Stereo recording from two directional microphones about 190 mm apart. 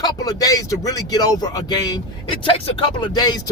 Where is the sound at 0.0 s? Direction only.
20° left (ahead or behind).